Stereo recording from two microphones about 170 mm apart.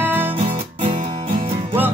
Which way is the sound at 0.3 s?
35° right (ahead or behind).